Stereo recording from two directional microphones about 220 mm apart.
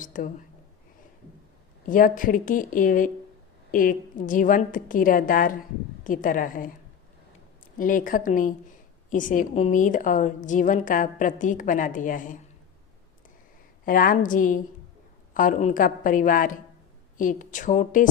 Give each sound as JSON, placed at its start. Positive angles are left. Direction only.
{"t": 0.0, "sound": "a woman's voice", "side_deg": 35}
{"t": 1.9, "sound": "a woman's voice", "side_deg": 40}
{"t": 7.8, "sound": "a woman's voice", "side_deg": 40}
{"t": 13.8, "sound": "a woman's voice", "side_deg": 40}